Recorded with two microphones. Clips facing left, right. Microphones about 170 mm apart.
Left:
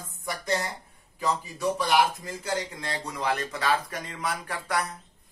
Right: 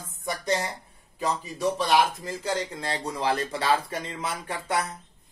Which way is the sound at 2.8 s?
30° right (ahead or behind).